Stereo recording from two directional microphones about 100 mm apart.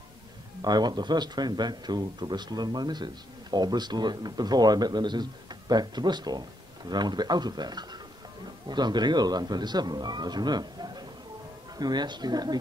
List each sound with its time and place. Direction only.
0.6 s speech: 45° right (ahead or behind)